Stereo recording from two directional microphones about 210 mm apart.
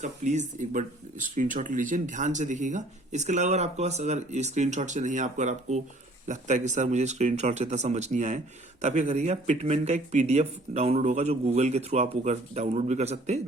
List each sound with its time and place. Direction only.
0.0 s speech: 35° right (ahead or behind)